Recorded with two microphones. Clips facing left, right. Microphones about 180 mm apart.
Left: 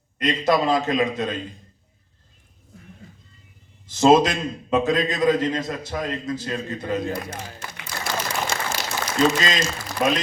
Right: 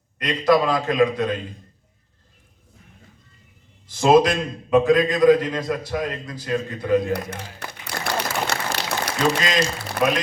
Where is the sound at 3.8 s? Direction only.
25° left (ahead or behind).